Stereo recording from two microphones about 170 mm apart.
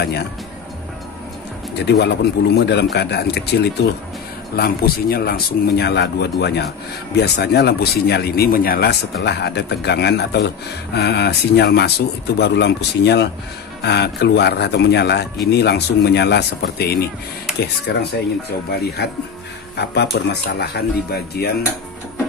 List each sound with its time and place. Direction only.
1.8 s speech: 80° left
4.6 s speech: 65° left (ahead or behind)
17.9 s speech: 90° left
19.0 s speech: 70° left (ahead or behind)